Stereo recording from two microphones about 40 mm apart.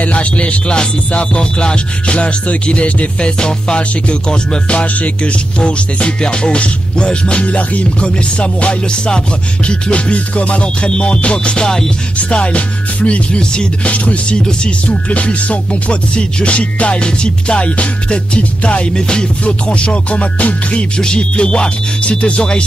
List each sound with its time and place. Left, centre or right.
0.0 s music: left
4.7 s music: left
7.4 s music: left; by 11.9 s centre
12.2 s music: left
13.4 s music: left
13.8 s music: left
18.9 s music: centre
20.2 s music: left
21.0 s music: left